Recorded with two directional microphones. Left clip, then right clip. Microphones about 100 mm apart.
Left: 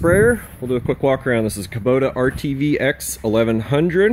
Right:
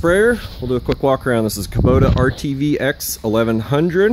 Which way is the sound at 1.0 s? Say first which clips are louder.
Right 2 dB; 25° right (ahead or behind).